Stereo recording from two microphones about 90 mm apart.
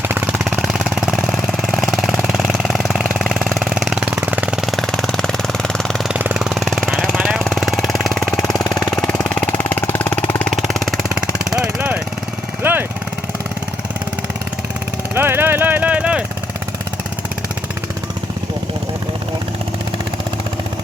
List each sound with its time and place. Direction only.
0.4 s a sound: 10° right (ahead or behind)
1.8 s engine: centre (ahead or behind); by 4.6 s 15° right (ahead or behind)
4.6 s a sound: 5° left (ahead or behind)
6.1 s engine: 15° right (ahead or behind)
6.5 s jackhammer: centre (ahead or behind)
9.0 s vehicle: 10° left (ahead or behind)
10.5 s vehicle: centre (ahead or behind)
11.1 s vehicle: 10° right (ahead or behind)
12.6 s vehicle: 25° right (ahead or behind)
15.1 s vehicle: 25° right (ahead or behind)